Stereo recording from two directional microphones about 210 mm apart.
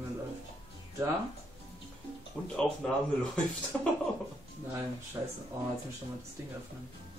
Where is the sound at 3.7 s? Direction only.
5° left (ahead or behind).